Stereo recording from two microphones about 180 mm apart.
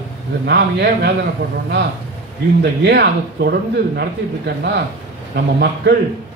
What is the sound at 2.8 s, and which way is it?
A man's voice, 65° right (ahead or behind).